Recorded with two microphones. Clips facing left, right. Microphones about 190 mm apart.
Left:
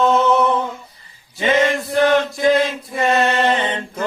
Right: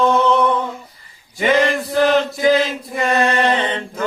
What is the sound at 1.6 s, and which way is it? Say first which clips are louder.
Chant: even; centre (ahead or behind).